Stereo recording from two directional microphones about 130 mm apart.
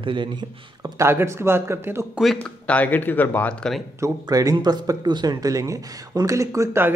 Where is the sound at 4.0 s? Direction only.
25° right (ahead or behind).